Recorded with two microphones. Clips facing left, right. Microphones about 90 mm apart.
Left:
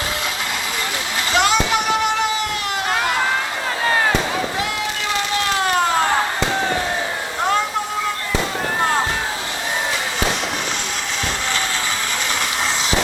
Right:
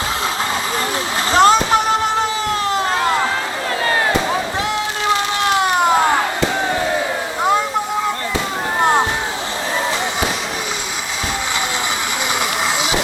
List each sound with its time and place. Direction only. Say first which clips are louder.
1.3 s vehicle: right 6 dB; 35° right (ahead or behind)